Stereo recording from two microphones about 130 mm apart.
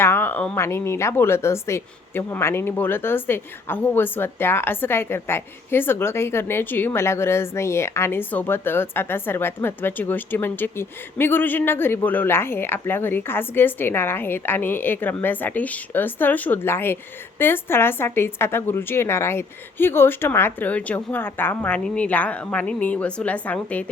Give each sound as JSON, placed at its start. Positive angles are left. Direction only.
{"t": 0.0, "sound": "speech", "side_deg": 15}